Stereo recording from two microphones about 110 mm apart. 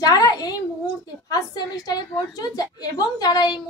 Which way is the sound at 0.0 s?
35° left (ahead or behind).